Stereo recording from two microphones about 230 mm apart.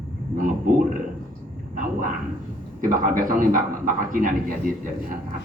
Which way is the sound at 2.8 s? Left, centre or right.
Right.